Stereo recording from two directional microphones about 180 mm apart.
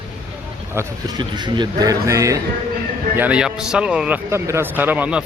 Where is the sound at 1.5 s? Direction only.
20° right (ahead or behind).